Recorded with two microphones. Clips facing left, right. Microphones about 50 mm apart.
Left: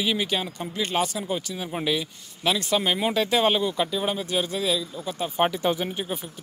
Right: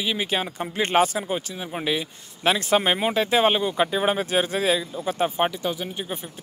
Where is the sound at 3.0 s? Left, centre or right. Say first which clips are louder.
Right 2 dB; centre; by 4.8 s right.